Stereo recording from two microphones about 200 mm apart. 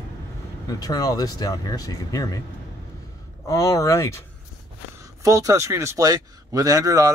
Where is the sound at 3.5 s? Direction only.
15° left (ahead or behind).